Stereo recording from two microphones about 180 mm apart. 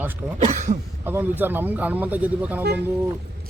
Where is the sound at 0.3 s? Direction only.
40° right (ahead or behind).